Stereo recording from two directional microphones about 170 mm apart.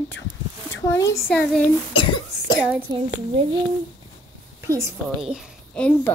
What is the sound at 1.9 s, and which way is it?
Cough, 25° left (ahead or behind).